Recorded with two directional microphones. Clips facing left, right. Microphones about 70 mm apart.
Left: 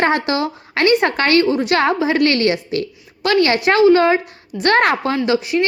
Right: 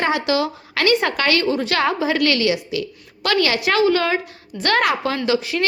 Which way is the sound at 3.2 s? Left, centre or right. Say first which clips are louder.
Left 4 dB; left.